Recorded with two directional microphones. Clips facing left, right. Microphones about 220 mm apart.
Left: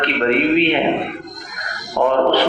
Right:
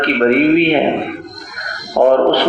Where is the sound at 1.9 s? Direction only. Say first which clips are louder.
Right 5 dB; 45° right (ahead or behind).